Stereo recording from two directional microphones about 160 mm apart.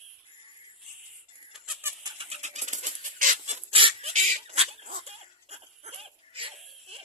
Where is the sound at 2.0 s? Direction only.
25° right (ahead or behind).